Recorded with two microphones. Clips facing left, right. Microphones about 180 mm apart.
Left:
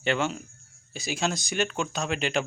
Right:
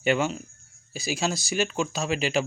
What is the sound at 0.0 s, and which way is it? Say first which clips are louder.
Speech: right 3 dB; 10° right (ahead or behind).